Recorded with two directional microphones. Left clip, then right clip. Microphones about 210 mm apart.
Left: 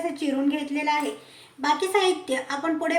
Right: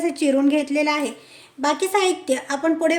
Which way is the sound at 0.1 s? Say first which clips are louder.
Right 7 dB; 55° right (ahead or behind).